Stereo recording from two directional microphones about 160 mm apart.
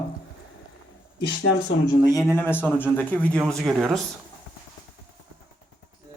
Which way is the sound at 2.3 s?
10° left (ahead or behind).